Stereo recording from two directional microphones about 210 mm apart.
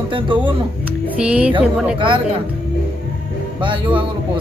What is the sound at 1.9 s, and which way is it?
Speech, 25° right (ahead or behind).